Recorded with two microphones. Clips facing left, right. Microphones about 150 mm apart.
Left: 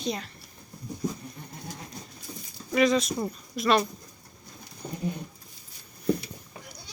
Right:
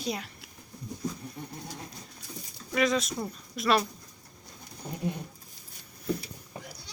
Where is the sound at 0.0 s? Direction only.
5° right (ahead or behind).